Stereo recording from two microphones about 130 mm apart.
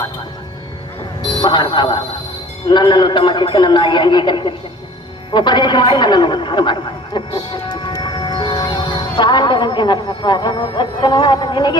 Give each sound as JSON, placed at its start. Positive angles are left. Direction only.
{"t": 1.3, "sound": "a man's voice", "side_deg": 35}